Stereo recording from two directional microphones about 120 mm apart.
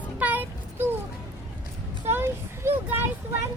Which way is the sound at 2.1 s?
20° right (ahead or behind).